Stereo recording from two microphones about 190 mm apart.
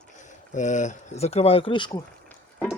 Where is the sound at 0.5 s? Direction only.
40° left (ahead or behind).